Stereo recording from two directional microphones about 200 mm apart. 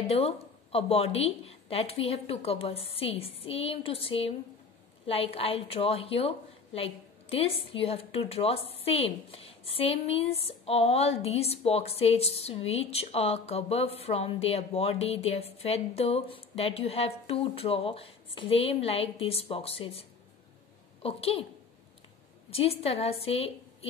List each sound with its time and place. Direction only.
0.1 s a woman's voice: 30° left (ahead or behind)
22.5 s a woman's voice: 30° left (ahead or behind)